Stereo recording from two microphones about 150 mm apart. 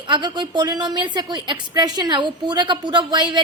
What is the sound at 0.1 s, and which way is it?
A woman's voice, 30° right (ahead or behind).